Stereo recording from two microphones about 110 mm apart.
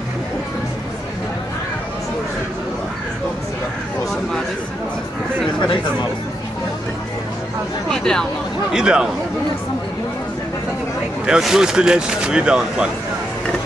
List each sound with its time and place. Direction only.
5.6 s speech: 45° left (ahead or behind)
7.9 s speech: 5° left (ahead or behind)
8.7 s speech: 5° right (ahead or behind)
11.2 s speech: 5° right (ahead or behind)